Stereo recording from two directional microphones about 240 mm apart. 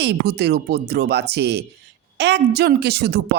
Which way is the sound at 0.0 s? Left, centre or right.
Right.